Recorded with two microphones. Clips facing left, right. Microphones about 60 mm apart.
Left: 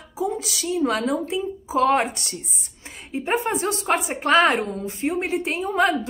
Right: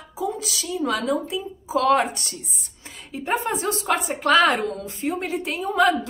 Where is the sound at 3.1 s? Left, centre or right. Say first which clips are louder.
Left 1 dB; left.